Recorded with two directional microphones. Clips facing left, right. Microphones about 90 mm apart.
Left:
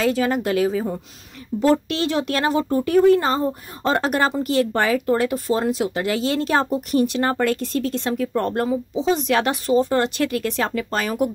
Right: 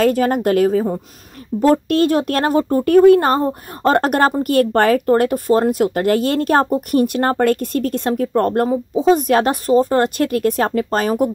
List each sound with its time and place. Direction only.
0.0 s speech: 50° right (ahead or behind)